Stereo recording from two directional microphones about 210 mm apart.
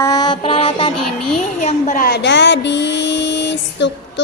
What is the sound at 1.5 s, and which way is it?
Speech, 35° left (ahead or behind).